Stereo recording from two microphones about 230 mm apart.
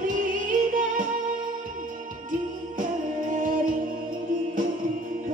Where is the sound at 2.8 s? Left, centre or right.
Right.